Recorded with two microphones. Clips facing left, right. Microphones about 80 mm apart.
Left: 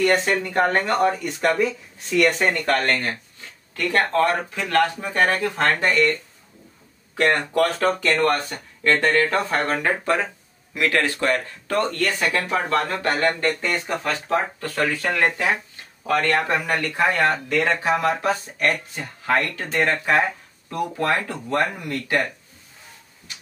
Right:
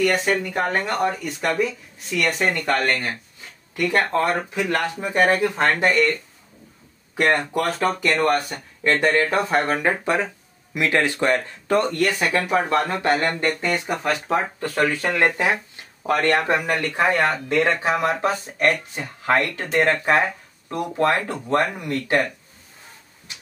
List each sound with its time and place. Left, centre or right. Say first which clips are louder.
0.0 s speech: left 1 dB; centre
7.2 s speech: left 1 dB; centre